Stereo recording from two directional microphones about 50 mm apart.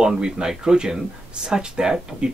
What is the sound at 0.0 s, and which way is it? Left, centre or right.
Speech, centre.